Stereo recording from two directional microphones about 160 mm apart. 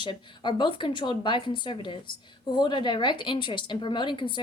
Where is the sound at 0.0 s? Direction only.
30° left (ahead or behind).